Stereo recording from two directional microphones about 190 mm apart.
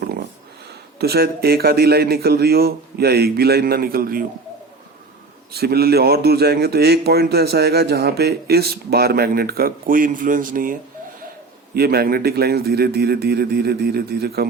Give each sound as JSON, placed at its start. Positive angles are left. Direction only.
{"t": 0.9, "sound": "speech", "side_deg": -55}
{"t": 5.5, "sound": "speech", "side_deg": -55}